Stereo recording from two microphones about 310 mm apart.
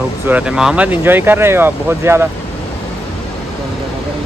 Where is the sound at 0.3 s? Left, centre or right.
Centre.